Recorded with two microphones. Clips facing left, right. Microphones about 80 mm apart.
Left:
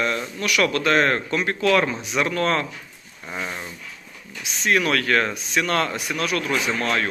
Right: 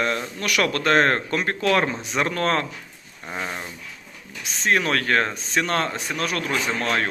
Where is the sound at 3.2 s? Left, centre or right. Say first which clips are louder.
Even; right.